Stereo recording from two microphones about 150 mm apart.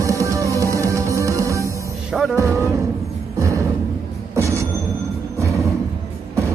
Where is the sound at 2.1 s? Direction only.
Centre (ahead or behind).